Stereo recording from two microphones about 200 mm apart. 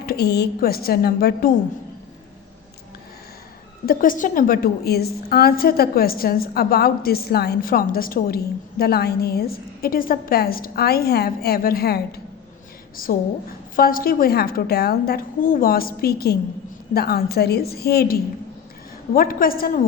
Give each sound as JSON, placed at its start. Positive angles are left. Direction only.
{"t": 0.0, "sound": "a woman's voice", "side_deg": 50}
{"t": 3.8, "sound": "a woman's voice", "side_deg": 45}
{"t": 13.7, "sound": "a woman's voice", "side_deg": 45}